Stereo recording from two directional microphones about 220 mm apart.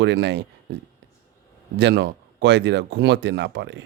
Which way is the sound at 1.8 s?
50° right (ahead or behind).